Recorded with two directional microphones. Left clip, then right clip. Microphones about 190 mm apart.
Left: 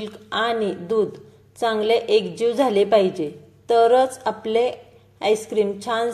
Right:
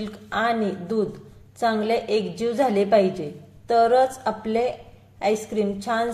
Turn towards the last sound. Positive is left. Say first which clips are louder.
# left 3 dB
turn(degrees=25)  # may be behind; listen again after turning